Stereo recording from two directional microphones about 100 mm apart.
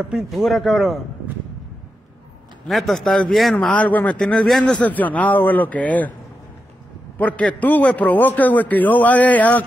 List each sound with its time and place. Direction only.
0.1 s speech: centre (ahead or behind)
2.7 s speech: centre (ahead or behind)
3.5 s speech: 15° left (ahead or behind)
7.2 s speech: 15° left (ahead or behind)